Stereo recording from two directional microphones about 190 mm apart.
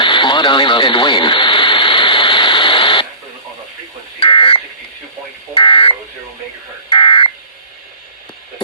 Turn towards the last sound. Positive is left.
turn(degrees=25)  # may be behind; listen again after turning